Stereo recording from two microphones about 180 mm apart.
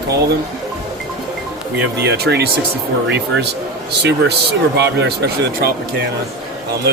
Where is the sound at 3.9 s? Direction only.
65° right (ahead or behind).